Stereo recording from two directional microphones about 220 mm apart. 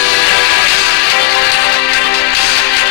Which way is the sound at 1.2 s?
50° left (ahead or behind).